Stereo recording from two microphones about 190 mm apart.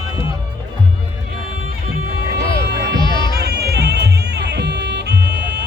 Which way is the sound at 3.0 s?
25° left (ahead or behind).